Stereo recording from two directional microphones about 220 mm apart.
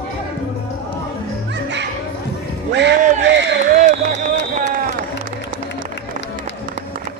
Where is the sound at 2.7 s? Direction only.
50° right (ahead or behind).